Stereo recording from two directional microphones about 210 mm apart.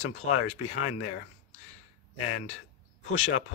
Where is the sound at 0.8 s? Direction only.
90° left.